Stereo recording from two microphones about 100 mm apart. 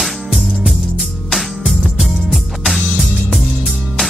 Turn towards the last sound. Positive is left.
turn(degrees=5)  # may be behind; listen again after turning